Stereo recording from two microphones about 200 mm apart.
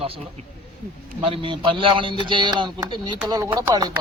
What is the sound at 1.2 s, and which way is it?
A man's voice, 25° right (ahead or behind).